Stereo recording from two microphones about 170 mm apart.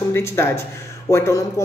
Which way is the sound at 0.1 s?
15° left (ahead or behind).